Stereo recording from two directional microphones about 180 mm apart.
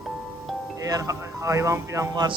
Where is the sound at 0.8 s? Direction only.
20° right (ahead or behind).